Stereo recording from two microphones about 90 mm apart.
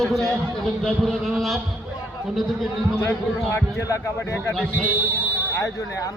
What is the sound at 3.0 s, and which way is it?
A man's voice, 30° left (ahead or behind).